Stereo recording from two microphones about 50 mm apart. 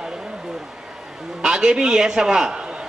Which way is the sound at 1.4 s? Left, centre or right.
Centre.